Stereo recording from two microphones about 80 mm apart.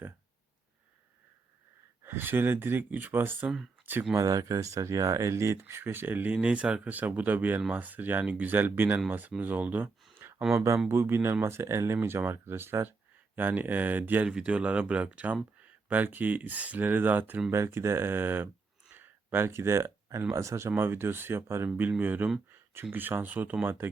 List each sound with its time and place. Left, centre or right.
2.0 s speech: right
4.1 s speech: right
6.3 s speech: centre
10.2 s a sound: right
10.8 s speech: right
17.5 s speech: right
18.9 s a sound: right
20.3 s speech: right